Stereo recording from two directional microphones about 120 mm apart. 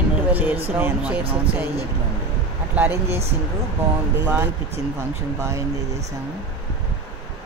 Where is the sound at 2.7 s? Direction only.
20° right (ahead or behind).